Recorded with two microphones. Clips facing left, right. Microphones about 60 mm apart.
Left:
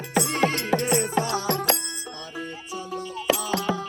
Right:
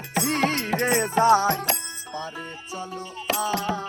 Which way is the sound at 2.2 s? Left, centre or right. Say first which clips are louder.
Right 4 dB; right.